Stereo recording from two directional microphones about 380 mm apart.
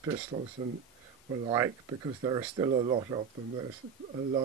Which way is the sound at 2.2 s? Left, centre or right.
Centre.